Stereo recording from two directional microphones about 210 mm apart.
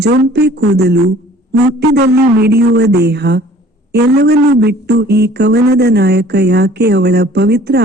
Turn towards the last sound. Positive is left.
turn(degrees=-50)  # may be behind; listen again after turning